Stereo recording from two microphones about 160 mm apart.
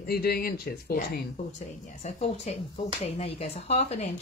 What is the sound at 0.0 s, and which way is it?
Speech, 70° left (ahead or behind).